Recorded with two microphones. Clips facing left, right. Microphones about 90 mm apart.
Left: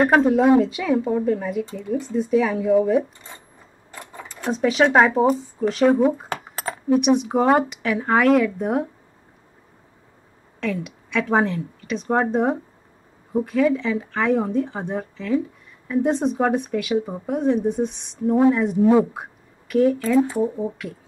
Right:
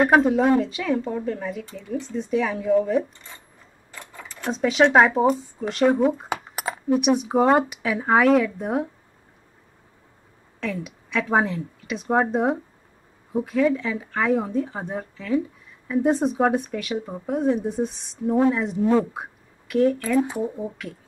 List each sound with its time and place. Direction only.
0.0 s speech: centre (ahead or behind)
6.2 s keys jangling: 15° right (ahead or behind)
6.9 s speech: centre (ahead or behind)
10.6 s speech: centre (ahead or behind)
20.3 s speech: 15° left (ahead or behind)
20.7 s speech: centre (ahead or behind)